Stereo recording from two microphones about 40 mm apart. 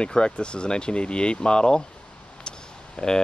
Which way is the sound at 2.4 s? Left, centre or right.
Centre.